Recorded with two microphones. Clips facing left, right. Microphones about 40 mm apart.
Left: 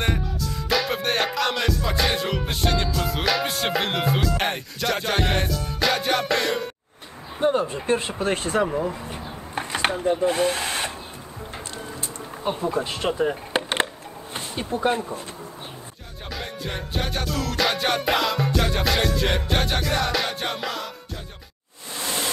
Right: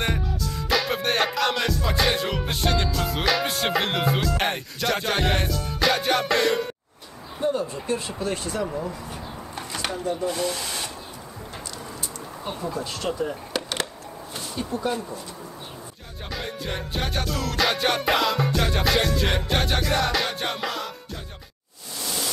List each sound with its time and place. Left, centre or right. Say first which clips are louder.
0.0 s music: left 1 dB; centre
7.3 s speech: left 4 dB; left
8.6 s speech: left 4 dB; left
12.4 s speech: left 6 dB; left
16.3 s music: right 1 dB; centre
21.9 s a sound: left 3 dB; left